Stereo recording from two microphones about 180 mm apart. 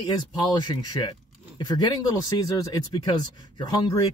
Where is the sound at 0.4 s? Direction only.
25° left (ahead or behind).